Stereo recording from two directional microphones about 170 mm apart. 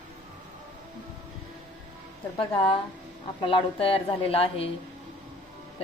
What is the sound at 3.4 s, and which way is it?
A woman's voice, 30° left (ahead or behind).